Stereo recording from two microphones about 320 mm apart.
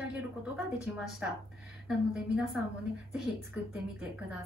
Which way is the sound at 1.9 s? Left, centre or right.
Centre.